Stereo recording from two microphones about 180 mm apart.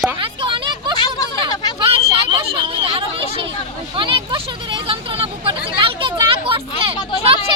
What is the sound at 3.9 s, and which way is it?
Speech, 30° right (ahead or behind).